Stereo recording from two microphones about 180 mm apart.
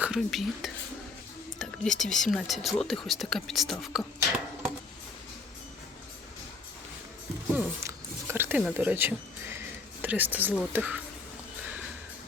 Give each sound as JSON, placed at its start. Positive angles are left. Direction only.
{"t": 0.0, "sound": "speech", "side_deg": 0}
{"t": 7.5, "sound": "a sound", "side_deg": -15}
{"t": 8.7, "sound": "speech", "side_deg": -10}